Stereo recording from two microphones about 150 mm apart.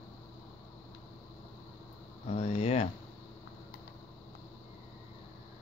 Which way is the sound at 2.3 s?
45° left (ahead or behind).